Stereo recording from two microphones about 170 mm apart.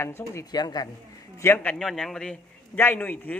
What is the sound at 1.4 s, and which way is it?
A man's voice, 10° left (ahead or behind).